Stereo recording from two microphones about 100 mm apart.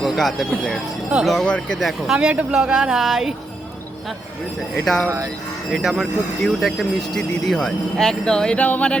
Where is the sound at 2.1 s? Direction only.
10° right (ahead or behind).